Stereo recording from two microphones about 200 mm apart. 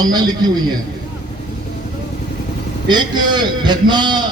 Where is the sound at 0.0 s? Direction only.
20° right (ahead or behind).